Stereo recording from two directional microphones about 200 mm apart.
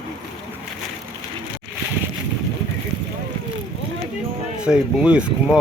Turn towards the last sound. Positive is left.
turn(degrees=-5)  # may be behind; listen again after turning